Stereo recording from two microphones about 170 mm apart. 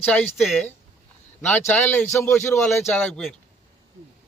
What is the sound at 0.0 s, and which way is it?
A man's voice, 10° left (ahead or behind).